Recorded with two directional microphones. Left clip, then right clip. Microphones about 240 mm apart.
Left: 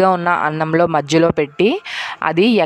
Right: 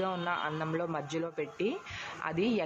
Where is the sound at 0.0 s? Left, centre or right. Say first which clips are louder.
Left 19 dB; left.